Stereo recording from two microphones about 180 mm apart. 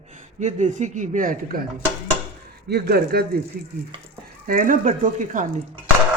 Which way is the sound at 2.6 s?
60° right (ahead or behind).